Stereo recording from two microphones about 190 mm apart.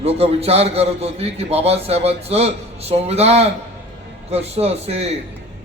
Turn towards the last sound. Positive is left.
turn(degrees=-35)  # may be behind; listen again after turning